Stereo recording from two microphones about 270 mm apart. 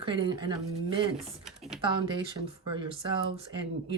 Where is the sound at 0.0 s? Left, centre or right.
Centre.